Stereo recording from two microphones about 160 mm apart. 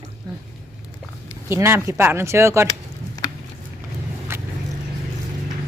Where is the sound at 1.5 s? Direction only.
15° right (ahead or behind).